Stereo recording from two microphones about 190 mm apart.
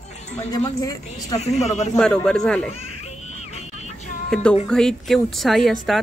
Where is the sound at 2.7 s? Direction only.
35° left (ahead or behind).